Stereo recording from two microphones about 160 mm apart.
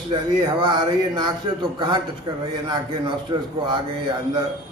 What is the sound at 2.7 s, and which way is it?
Speech, 30° right (ahead or behind).